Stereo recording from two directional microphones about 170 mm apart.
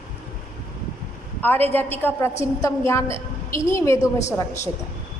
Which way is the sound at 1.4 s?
10° left (ahead or behind).